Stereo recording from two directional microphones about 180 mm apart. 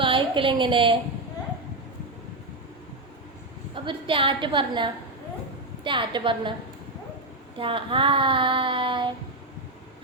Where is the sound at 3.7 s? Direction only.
30° right (ahead or behind).